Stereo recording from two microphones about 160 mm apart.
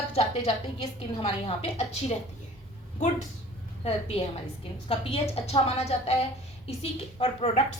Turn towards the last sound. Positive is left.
turn(degrees=40)  # may be behind; listen again after turning